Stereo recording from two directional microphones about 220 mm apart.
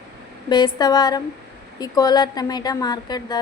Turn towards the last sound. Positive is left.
turn(degrees=20)  # may be behind; listen again after turning